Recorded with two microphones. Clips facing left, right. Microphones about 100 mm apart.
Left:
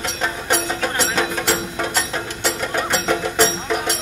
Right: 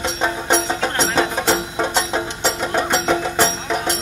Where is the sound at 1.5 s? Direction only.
20° right (ahead or behind).